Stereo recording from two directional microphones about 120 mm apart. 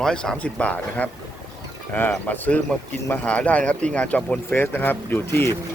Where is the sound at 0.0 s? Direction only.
5° left (ahead or behind).